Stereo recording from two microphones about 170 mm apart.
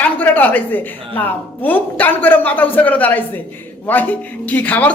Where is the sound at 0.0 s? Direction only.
10° left (ahead or behind).